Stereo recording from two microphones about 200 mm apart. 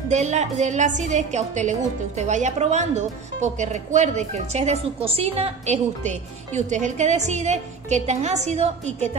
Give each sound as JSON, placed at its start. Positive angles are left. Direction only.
{"t": 0.1, "sound": "a woman's voice", "side_deg": -35}